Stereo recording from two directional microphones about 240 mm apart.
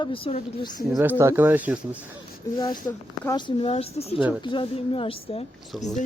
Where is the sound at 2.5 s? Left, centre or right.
Centre.